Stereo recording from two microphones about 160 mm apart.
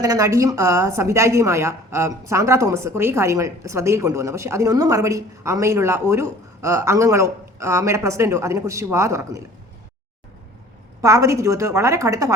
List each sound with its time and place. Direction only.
0.0 s a woman's voice: 20° right (ahead or behind)
11.0 s a woman's voice: 20° right (ahead or behind)